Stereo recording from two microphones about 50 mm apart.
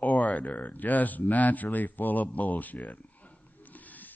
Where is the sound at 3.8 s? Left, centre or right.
Left.